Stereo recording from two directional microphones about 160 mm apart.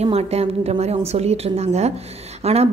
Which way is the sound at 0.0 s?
40° right (ahead or behind).